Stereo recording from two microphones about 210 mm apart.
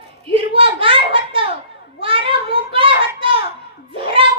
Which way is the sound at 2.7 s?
25° right (ahead or behind).